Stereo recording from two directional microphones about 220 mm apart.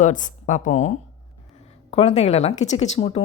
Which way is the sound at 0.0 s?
35° left (ahead or behind).